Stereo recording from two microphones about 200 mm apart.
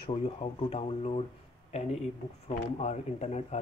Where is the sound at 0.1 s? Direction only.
25° left (ahead or behind).